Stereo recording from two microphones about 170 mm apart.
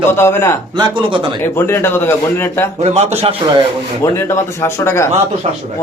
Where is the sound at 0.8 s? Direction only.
25° right (ahead or behind).